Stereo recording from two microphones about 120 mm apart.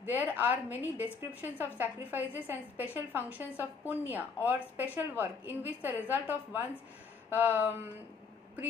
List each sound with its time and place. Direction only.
0.0 s a woman's voice: 15° right (ahead or behind)